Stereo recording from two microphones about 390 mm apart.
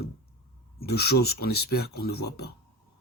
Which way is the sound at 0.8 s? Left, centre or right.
Left.